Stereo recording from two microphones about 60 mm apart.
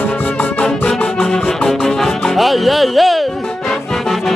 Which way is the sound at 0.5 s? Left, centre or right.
Left.